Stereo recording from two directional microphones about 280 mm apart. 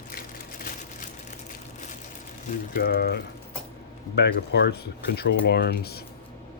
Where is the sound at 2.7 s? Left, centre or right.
Left.